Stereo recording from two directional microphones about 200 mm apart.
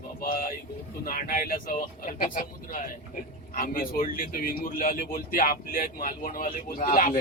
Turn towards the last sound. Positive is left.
turn(degrees=45)  # may be behind; listen again after turning